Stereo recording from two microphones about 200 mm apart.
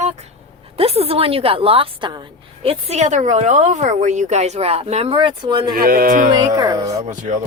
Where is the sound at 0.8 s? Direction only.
30° right (ahead or behind).